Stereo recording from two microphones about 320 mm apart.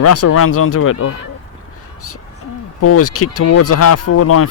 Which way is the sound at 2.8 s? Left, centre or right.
Left.